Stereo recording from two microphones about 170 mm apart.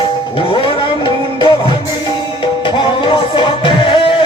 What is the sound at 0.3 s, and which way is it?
Music, 30° left (ahead or behind).